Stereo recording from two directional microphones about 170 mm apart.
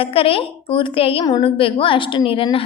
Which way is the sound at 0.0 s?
35° left (ahead or behind).